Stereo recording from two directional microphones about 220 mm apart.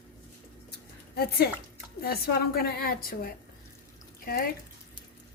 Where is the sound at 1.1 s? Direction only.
45° left (ahead or behind).